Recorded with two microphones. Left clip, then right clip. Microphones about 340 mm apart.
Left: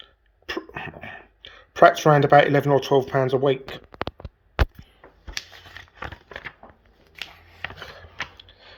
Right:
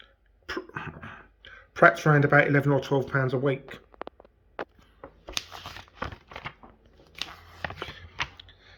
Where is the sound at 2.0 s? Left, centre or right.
Left.